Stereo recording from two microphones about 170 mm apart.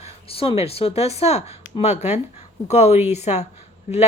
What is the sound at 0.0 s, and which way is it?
Speech, 35° left (ahead or behind).